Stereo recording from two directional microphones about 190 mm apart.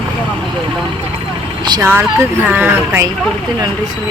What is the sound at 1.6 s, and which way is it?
Speech, 20° right (ahead or behind).